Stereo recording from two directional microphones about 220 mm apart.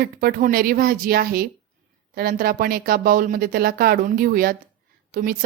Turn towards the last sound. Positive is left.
turn(degrees=-40)  # may be behind; listen again after turning